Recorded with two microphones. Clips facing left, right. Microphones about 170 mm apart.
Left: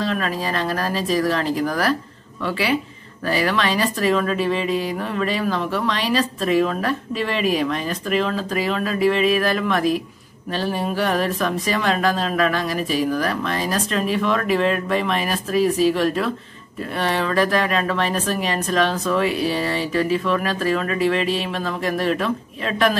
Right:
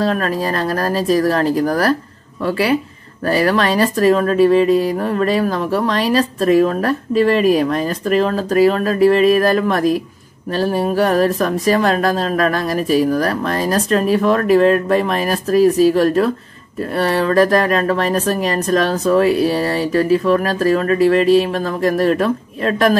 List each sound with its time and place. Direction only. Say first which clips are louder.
0.0 s speech: right 5 dB; 45° right (ahead or behind)